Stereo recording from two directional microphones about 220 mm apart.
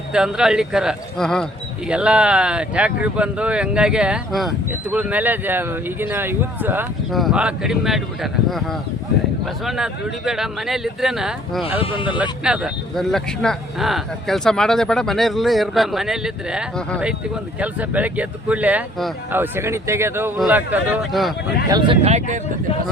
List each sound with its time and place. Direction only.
0.1 s speech: 5° right (ahead or behind)
11.8 s speech: 25° left (ahead or behind)
12.0 s speech: 5° right (ahead or behind)
21.7 s speech: 20° right (ahead or behind)